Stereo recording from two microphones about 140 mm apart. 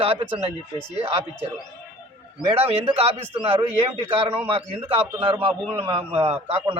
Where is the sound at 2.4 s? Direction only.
45° right (ahead or behind).